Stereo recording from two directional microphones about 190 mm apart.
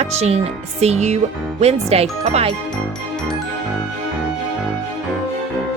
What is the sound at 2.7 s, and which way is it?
Music, 5° left (ahead or behind).